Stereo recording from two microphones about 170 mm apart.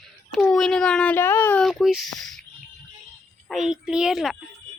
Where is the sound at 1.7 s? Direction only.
Centre (ahead or behind).